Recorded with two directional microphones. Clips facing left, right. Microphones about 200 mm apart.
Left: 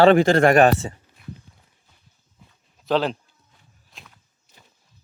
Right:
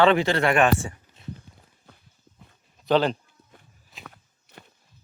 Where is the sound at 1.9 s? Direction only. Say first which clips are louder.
Right 10 dB; 65° right (ahead or behind).